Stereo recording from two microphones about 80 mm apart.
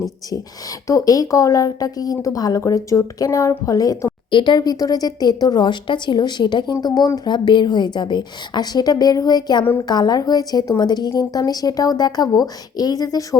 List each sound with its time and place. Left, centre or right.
0.3 s a woman's voice: left
4.3 s a woman's voice: left
6.8 s a woman's voice: left
7.3 s a woman's voice: left
11.1 s a woman's voice: left